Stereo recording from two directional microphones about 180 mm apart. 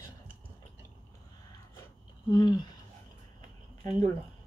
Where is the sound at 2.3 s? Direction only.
25° left (ahead or behind).